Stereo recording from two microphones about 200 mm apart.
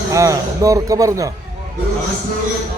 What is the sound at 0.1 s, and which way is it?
Speech, 15° right (ahead or behind).